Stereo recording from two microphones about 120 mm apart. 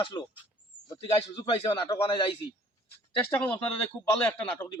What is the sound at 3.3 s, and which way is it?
Speech, 15° left (ahead or behind).